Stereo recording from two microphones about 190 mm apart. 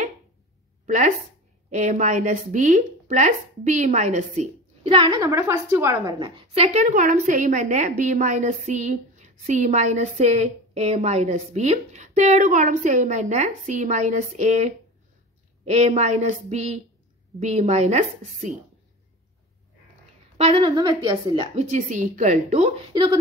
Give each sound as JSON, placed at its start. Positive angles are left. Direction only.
{"t": 0.8, "sound": "a woman's voice", "side_deg": -40}
{"t": 5.1, "sound": "a woman's voice", "side_deg": -15}
{"t": 6.4, "sound": "a woman's voice", "side_deg": -35}
{"t": 20.3, "sound": "a woman's voice", "side_deg": -30}
{"t": 21.5, "sound": "a woman's voice", "side_deg": -40}